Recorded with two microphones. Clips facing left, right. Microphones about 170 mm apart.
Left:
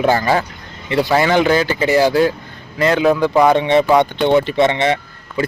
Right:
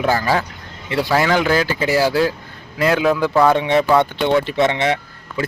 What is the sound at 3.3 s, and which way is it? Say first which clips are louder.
Speech: even; 15° left (ahead or behind).